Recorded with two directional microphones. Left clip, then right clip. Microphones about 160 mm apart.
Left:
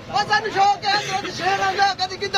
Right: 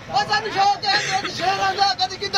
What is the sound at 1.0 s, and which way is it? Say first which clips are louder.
Speech: right 2 dB; 20° right (ahead or behind).